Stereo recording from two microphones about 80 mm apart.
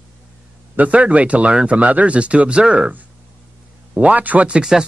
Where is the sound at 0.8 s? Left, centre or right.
Centre.